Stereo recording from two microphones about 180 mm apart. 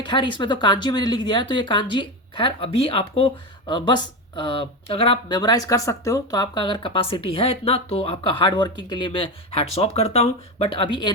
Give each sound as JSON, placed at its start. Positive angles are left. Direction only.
{"t": 0.0, "sound": "speech", "side_deg": 25}